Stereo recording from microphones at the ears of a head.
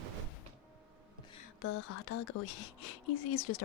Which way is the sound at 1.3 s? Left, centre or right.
Left.